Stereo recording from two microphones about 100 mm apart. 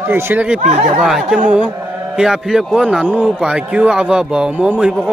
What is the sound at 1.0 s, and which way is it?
Speech, 5° right (ahead or behind).